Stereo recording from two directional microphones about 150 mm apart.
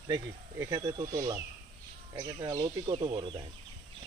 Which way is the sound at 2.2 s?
30° right (ahead or behind).